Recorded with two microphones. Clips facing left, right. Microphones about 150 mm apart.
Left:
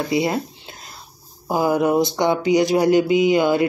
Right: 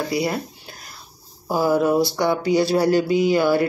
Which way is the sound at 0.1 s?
20° left (ahead or behind).